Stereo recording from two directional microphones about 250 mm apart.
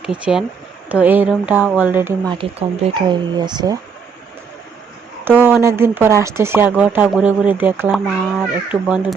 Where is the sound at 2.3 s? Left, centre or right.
Centre.